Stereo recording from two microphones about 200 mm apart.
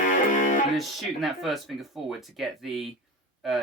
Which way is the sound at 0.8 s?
Centre (ahead or behind).